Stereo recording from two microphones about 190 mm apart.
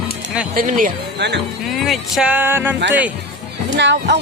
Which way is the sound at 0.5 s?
45° right (ahead or behind).